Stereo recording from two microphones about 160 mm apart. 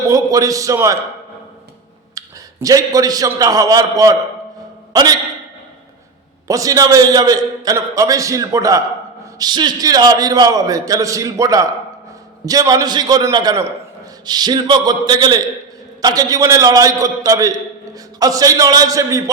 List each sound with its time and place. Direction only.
0.1 s a man's voice: 20° right (ahead or behind)
2.1 s a man's voice: 20° right (ahead or behind)
6.5 s a man's voice: 20° right (ahead or behind)